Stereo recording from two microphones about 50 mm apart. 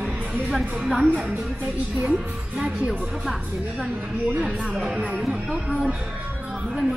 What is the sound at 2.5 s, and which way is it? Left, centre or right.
Speech, right.